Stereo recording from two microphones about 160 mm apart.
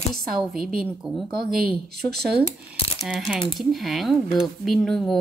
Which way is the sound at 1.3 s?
70° right (ahead or behind).